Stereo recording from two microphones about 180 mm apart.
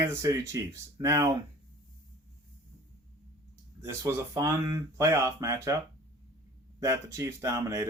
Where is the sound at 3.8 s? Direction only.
15° right (ahead or behind).